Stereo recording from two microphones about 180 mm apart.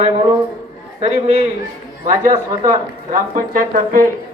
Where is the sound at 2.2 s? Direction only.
20° right (ahead or behind).